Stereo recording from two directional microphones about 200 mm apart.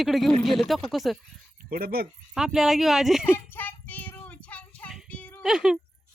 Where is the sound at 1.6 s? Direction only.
45° right (ahead or behind).